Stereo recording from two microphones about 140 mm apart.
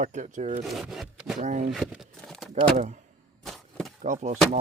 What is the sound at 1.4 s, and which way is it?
Speech, 60° right (ahead or behind).